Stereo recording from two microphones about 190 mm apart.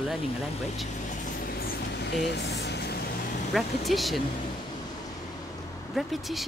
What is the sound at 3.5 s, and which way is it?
Speech, centre (ahead or behind).